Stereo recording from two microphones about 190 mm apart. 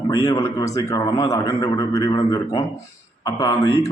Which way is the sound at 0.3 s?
15° left (ahead or behind).